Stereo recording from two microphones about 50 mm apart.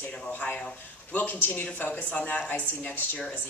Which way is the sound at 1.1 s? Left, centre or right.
Left.